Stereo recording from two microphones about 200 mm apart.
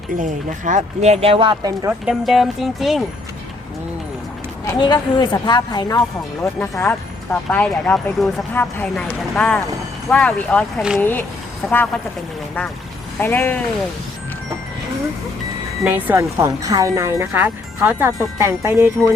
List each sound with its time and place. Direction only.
0.2 s speech: 40° right (ahead or behind); by 2.0 s 20° right (ahead or behind)
2.0 s speech: centre (ahead or behind)
4.6 s a woman's voice: 20° left (ahead or behind); by 11.0 s centre (ahead or behind)
11.0 s speech: 10° left (ahead or behind)
13.1 s speech: 10° left (ahead or behind)
15.8 s speech: 10° right (ahead or behind)